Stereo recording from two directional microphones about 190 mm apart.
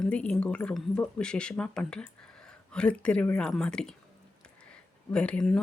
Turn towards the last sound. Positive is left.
turn(degrees=5)  # may be behind; listen again after turning